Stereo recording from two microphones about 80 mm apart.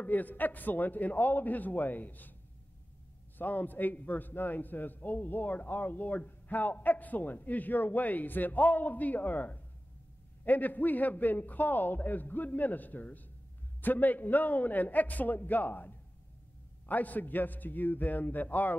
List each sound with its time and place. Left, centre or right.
0.0 s a man's voice: left
3.3 s a man's voice: left